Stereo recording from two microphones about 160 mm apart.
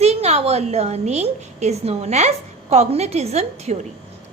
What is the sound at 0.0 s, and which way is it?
A woman's voice, 40° right (ahead or behind).